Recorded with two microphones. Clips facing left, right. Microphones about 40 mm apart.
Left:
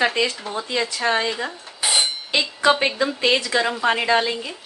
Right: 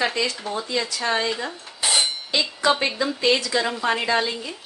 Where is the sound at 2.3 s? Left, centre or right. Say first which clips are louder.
Left 4 dB; left.